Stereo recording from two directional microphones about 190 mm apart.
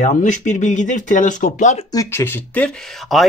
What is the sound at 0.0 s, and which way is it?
Speech, 40° left (ahead or behind).